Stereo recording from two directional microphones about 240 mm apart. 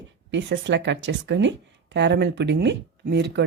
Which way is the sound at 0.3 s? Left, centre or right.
Right.